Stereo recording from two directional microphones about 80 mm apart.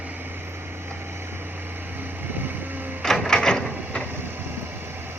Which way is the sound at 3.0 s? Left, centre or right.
Centre.